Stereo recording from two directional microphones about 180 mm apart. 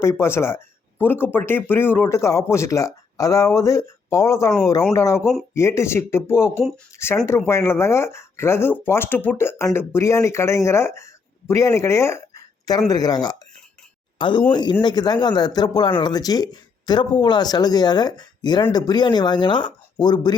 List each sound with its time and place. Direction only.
0.0 s speech: 15° left (ahead or behind)